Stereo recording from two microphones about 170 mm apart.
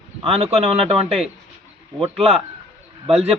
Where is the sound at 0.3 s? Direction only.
35° right (ahead or behind).